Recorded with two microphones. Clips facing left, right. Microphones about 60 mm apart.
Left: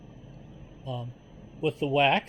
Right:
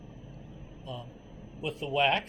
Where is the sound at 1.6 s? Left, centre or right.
Left.